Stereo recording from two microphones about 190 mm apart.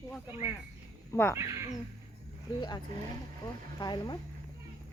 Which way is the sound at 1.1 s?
15° left (ahead or behind).